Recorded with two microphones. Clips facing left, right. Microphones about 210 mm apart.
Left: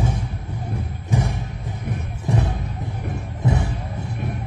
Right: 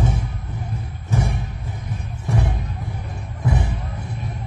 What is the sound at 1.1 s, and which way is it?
Music, 15° left (ahead or behind).